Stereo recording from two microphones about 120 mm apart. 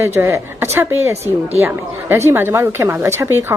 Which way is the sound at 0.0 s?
20° right (ahead or behind).